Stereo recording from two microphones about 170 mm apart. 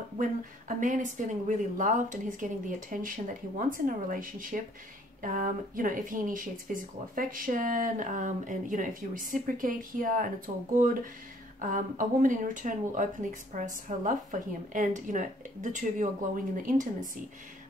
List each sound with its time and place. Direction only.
0.2 s speech: 50° right (ahead or behind)